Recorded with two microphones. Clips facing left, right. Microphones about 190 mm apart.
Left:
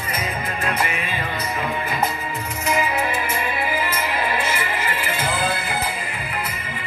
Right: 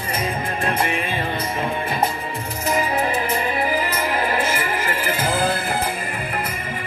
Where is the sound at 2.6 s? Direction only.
35° right (ahead or behind).